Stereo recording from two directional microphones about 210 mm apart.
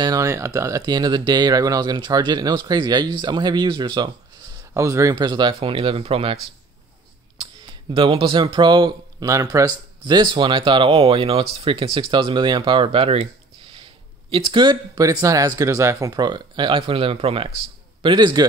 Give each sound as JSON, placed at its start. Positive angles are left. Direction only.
{"t": 0.0, "sound": "speech", "side_deg": -15}
{"t": 7.9, "sound": "speech", "side_deg": -25}